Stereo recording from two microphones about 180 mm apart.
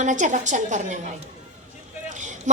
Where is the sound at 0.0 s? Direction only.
45° right (ahead or behind).